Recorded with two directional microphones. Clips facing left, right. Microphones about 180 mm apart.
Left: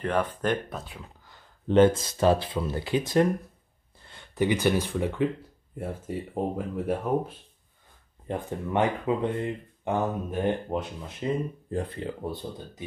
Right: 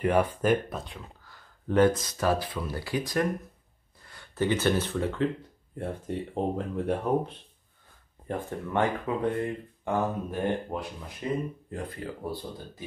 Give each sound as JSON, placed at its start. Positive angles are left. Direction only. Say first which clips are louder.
{"t": 0.0, "sound": "speech", "louder": "right 2 dB", "side_deg": -10}
{"t": 1.7, "sound": "speech", "louder": "left 3 dB", "side_deg": 25}
{"t": 5.8, "sound": "speech", "louder": "even", "side_deg": 5}
{"t": 8.3, "sound": "speech", "louder": "left 2 dB", "side_deg": 15}